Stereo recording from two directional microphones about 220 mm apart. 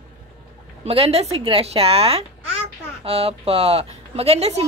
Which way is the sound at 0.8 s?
25° right (ahead or behind).